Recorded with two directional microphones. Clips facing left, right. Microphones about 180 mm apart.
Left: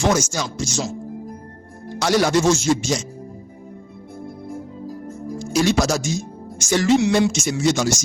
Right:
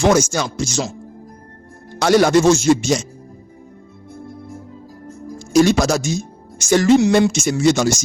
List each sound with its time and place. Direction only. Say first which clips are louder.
0.0 s speech: right 5 dB; 65° right (ahead or behind)
2.0 s speech: right 5 dB; 55° right (ahead or behind)
5.4 s speech: right 5 dB; 50° right (ahead or behind)
6.7 s music: right 4 dB; 50° right (ahead or behind)